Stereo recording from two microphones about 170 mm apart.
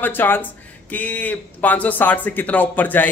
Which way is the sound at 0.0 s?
10° left (ahead or behind).